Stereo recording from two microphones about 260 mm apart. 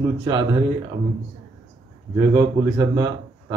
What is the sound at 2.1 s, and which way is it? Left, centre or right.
A man's voice, centre.